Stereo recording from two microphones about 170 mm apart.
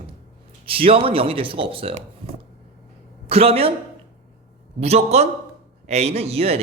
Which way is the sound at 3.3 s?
35° right (ahead or behind).